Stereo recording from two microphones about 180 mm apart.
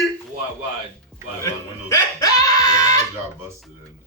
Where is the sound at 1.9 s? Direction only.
20° left (ahead or behind).